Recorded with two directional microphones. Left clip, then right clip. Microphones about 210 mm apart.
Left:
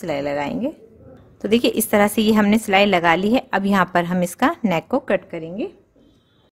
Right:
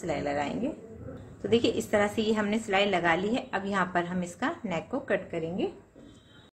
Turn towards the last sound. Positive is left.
turn(degrees=55)  # may be behind; listen again after turning